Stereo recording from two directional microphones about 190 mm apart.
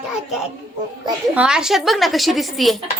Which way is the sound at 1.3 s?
5° right (ahead or behind).